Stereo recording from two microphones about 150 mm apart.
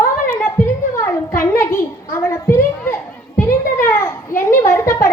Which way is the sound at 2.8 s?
15° left (ahead or behind).